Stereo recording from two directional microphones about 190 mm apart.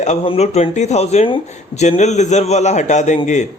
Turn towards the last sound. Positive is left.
turn(degrees=35)  # may be behind; listen again after turning